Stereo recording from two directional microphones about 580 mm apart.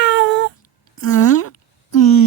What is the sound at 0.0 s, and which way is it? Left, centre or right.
Cat, centre.